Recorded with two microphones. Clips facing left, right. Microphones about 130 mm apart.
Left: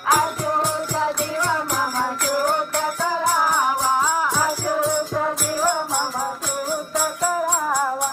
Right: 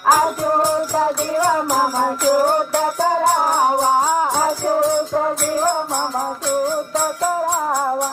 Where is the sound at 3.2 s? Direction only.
55° right (ahead or behind).